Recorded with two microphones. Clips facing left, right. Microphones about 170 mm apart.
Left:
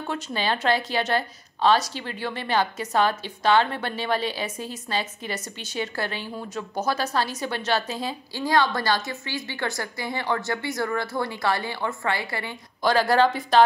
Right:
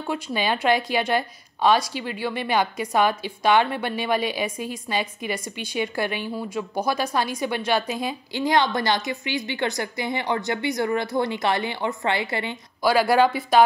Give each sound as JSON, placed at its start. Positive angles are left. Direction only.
{"t": 0.0, "sound": "a woman's voice", "side_deg": -10}
{"t": 12.8, "sound": "a woman's voice", "side_deg": -10}